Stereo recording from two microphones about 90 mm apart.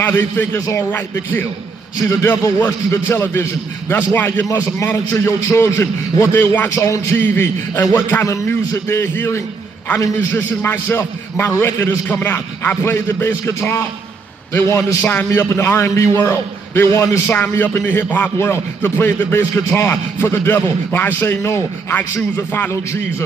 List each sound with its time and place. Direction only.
0.0 s speech: 25° left (ahead or behind)
0.6 s a man's voice: 35° left (ahead or behind)
0.9 s speech: 25° left (ahead or behind)
3.1 s speech: 30° left (ahead or behind)
4.5 s a man's voice: 35° left (ahead or behind)
7.2 s speech: 25° left (ahead or behind)
17.4 s speech: 20° left (ahead or behind)